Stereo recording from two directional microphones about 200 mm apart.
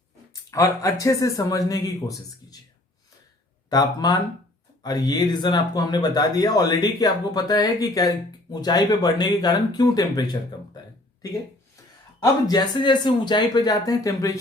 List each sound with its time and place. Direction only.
0.5 s a man's voice: 15° left (ahead or behind)
3.7 s speech: 20° left (ahead or behind)
12.2 s speech: 20° left (ahead or behind)